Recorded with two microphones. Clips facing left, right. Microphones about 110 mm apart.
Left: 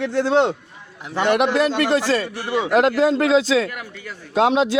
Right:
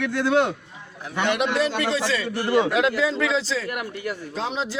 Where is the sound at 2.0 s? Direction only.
45° left (ahead or behind).